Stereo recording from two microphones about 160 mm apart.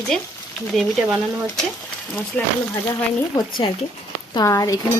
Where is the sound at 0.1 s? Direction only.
5° left (ahead or behind).